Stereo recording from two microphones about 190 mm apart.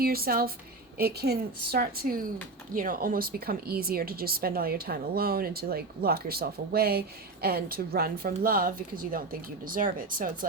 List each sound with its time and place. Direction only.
0.0 s speech: 50° right (ahead or behind)